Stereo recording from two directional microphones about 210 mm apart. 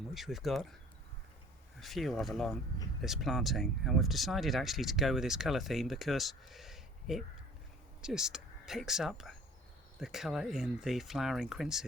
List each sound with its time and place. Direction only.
0.1 s speech: centre (ahead or behind)
1.8 s speech: centre (ahead or behind)